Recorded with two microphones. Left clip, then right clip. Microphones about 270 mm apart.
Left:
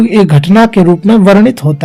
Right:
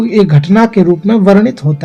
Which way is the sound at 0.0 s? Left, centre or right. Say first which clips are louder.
Left 2 dB; left.